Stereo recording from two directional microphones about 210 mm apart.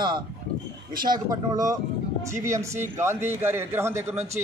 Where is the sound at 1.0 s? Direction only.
20° right (ahead or behind).